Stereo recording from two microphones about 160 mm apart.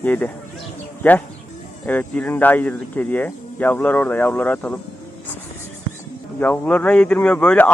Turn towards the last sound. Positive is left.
turn(degrees=10)  # may be behind; listen again after turning